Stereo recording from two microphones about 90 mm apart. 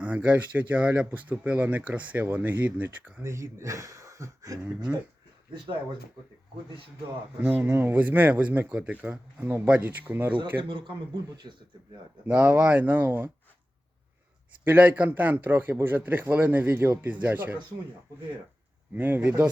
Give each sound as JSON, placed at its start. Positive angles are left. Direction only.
{"t": 0.0, "sound": "speech", "side_deg": -15}
{"t": 3.2, "sound": "speech", "side_deg": -35}
{"t": 4.9, "sound": "speech", "side_deg": -15}
{"t": 7.4, "sound": "a man's voice", "side_deg": -15}
{"t": 10.6, "sound": "speech", "side_deg": -65}
{"t": 12.2, "sound": "a man's voice", "side_deg": -15}
{"t": 14.6, "sound": "a man's voice", "side_deg": -20}
{"t": 18.9, "sound": "a man's voice", "side_deg": -20}